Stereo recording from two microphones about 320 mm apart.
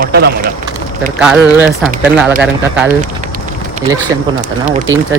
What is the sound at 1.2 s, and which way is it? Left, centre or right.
Speech, centre.